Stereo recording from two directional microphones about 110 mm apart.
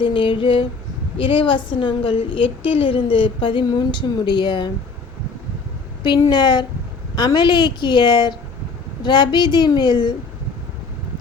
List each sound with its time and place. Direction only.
0.0 s a woman's voice: 50° left (ahead or behind)
6.0 s a woman's voice: 45° left (ahead or behind)